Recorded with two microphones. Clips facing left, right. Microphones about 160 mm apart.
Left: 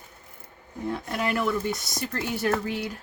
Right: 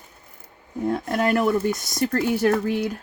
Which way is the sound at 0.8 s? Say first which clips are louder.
Right 6 dB; 45° right (ahead or behind).